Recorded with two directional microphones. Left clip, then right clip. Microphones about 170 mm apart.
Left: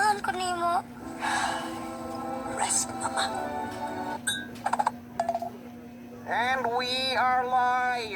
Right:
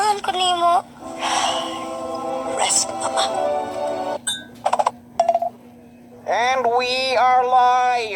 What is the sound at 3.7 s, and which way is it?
Music, 60° right (ahead or behind).